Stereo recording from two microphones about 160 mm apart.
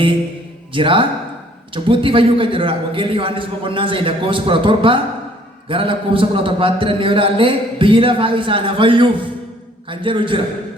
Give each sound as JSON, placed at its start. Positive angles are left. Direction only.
{"t": 0.7, "sound": "a man's voice", "side_deg": -30}